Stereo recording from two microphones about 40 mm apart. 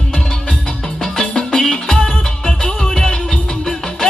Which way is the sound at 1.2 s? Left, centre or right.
Centre.